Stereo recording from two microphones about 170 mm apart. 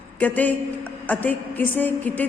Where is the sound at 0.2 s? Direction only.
10° left (ahead or behind).